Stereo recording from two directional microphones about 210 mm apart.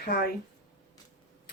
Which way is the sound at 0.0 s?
45° left (ahead or behind).